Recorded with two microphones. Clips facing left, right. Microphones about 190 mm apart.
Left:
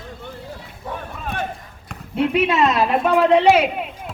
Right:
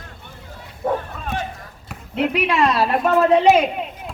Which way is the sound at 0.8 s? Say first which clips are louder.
Right 9 dB; 55° right (ahead or behind).